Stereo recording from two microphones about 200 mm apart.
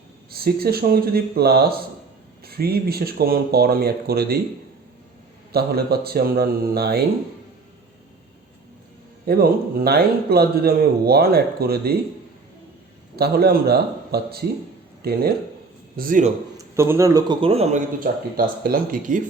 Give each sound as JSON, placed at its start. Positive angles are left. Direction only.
{"t": 0.3, "sound": "a man's voice", "side_deg": -50}
{"t": 5.5, "sound": "a man's voice", "side_deg": -50}
{"t": 9.2, "sound": "a man's voice", "side_deg": -50}
{"t": 13.1, "sound": "a man's voice", "side_deg": -50}
{"t": 16.7, "sound": "a man's voice", "side_deg": -15}
{"t": 18.0, "sound": "a man's voice", "side_deg": -45}